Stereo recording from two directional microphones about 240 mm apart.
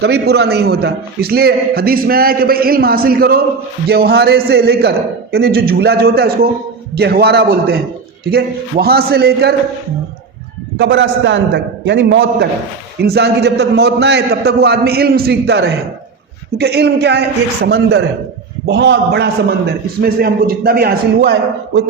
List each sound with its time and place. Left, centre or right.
0.0 s a man's voice: right
10.8 s a man's voice: right